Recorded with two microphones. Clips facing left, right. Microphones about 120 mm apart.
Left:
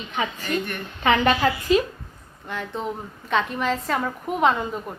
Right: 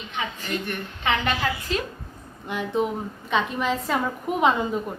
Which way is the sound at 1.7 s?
10° left (ahead or behind).